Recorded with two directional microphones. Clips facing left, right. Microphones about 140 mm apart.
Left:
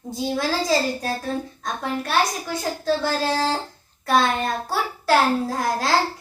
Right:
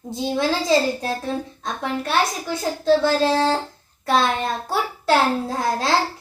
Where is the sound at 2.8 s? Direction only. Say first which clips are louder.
Right 6 dB; 25° right (ahead or behind).